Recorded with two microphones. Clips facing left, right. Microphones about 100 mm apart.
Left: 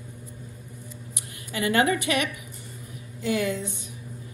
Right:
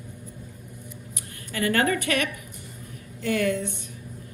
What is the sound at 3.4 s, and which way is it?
Speech, 55° right (ahead or behind).